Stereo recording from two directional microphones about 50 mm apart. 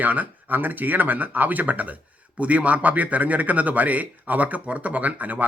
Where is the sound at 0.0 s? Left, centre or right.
Right.